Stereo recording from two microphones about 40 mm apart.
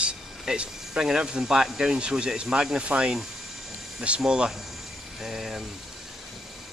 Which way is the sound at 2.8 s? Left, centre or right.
Right.